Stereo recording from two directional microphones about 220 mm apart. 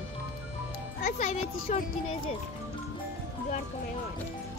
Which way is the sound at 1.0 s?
30° left (ahead or behind).